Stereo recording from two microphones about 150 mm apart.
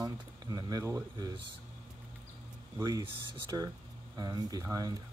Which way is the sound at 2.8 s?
30° right (ahead or behind).